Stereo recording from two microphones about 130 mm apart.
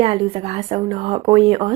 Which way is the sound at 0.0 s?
50° right (ahead or behind).